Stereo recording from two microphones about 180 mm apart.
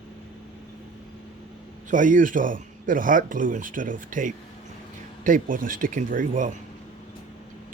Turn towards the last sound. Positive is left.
turn(degrees=-50)  # may be behind; listen again after turning